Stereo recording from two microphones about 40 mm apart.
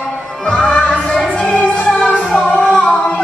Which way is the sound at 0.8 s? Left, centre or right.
Left.